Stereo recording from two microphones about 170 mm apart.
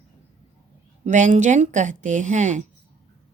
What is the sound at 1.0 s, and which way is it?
Speech, 45° right (ahead or behind).